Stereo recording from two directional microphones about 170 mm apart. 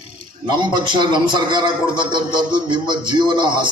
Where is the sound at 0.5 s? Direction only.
25° right (ahead or behind).